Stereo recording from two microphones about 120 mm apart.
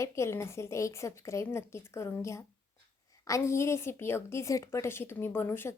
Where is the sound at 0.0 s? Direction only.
25° left (ahead or behind).